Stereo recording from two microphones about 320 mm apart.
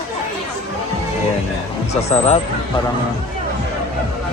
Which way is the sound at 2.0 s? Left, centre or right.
Centre.